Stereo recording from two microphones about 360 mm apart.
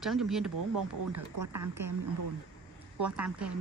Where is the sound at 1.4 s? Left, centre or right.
Right.